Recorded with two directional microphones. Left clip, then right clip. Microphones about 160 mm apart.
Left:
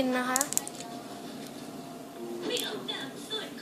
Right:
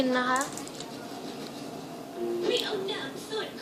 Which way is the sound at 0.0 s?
35° left (ahead or behind).